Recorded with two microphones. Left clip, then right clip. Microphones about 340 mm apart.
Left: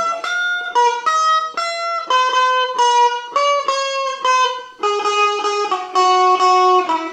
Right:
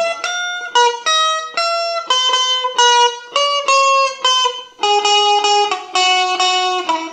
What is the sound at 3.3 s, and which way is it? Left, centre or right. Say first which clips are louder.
Music: right 2 dB; right.